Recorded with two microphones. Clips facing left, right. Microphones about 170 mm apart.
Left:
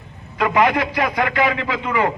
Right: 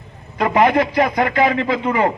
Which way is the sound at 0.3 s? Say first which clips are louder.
Right 3 dB; 35° right (ahead or behind).